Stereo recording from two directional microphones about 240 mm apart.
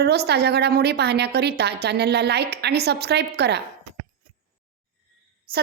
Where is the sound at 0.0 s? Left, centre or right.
Right.